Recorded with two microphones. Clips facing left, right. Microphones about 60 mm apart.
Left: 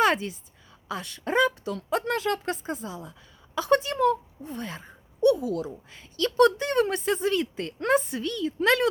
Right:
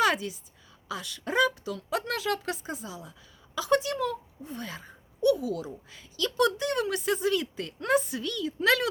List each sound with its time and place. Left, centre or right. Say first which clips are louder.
0.0 s a woman's voice: left 3 dB; left